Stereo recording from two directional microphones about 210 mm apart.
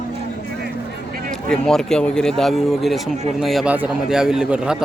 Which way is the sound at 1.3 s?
5° left (ahead or behind).